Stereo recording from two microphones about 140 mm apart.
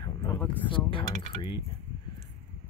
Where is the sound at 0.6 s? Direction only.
40° left (ahead or behind).